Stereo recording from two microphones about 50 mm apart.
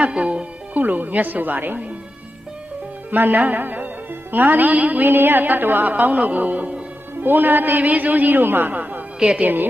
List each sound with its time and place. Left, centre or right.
0.0 s music: right
0.8 s a woman's voice: right
3.1 s a woman's voice: right
9.1 s speech: right